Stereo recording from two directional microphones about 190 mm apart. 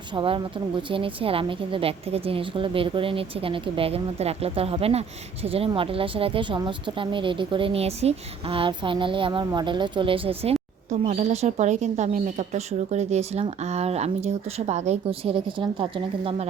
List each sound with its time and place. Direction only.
0.1 s a woman's voice: 25° right (ahead or behind)